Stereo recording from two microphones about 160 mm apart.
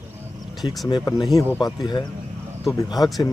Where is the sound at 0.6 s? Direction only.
Centre (ahead or behind).